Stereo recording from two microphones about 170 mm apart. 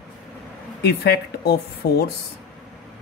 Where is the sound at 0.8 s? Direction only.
65° left (ahead or behind).